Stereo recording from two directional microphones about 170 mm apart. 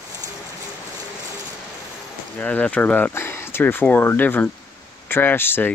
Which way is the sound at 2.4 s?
10° left (ahead or behind).